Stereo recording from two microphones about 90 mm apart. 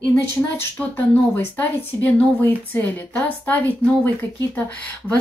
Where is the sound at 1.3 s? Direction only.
20° left (ahead or behind).